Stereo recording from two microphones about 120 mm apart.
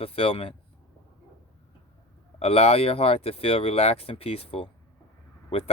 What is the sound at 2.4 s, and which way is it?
Speech, 60° left (ahead or behind).